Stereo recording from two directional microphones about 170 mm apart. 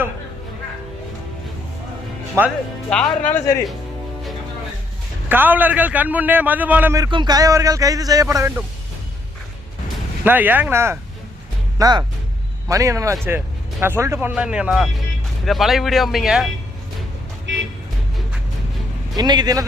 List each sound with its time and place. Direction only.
2.4 s a man's voice: 15° right (ahead or behind)
2.9 s speech: 5° left (ahead or behind)
5.3 s a man's voice: 10° right (ahead or behind)
10.2 s a man's voice: 10° right (ahead or behind)
17.5 s music: 90° right
19.1 s speech: 25° right (ahead or behind)